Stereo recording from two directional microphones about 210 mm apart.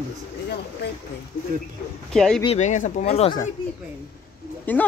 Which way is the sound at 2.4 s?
30° left (ahead or behind).